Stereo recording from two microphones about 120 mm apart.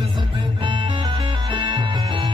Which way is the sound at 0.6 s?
40° right (ahead or behind).